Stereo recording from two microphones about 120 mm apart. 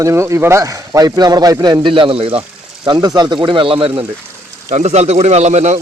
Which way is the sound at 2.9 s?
35° right (ahead or behind).